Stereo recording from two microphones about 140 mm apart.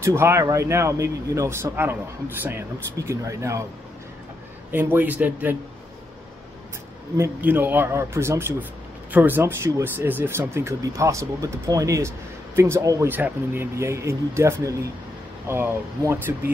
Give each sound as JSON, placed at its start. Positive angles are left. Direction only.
{"t": 0.0, "sound": "a man's voice", "side_deg": -20}
{"t": 4.6, "sound": "a man's voice", "side_deg": -15}
{"t": 7.2, "sound": "a man's voice", "side_deg": -15}